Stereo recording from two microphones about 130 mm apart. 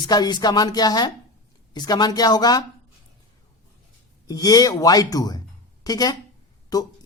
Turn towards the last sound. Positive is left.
turn(degrees=30)  # may be behind; listen again after turning